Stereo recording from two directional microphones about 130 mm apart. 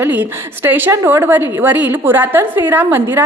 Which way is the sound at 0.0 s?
15° right (ahead or behind).